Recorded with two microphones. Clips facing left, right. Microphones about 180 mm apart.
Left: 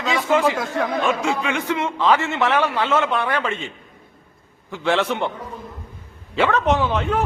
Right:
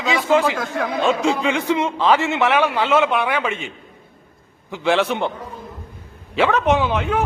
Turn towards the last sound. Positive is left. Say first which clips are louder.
# right 1 dB
turn(degrees=-5)  # may be behind; listen again after turning